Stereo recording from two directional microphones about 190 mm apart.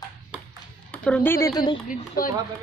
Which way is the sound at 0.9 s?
5° left (ahead or behind).